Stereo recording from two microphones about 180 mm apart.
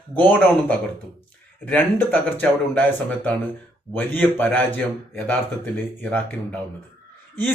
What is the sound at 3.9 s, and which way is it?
Speech, 10° left (ahead or behind).